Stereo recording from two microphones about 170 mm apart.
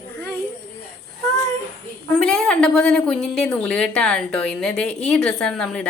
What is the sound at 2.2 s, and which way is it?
A woman's voice, 5° left (ahead or behind).